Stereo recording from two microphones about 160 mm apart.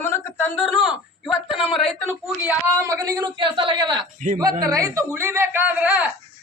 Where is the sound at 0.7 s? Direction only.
5° right (ahead or behind).